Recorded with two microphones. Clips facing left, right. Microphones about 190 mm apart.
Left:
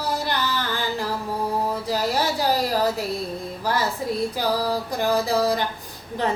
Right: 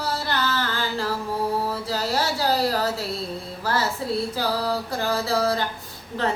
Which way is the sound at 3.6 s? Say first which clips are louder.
Left 1 dB; 15° left (ahead or behind).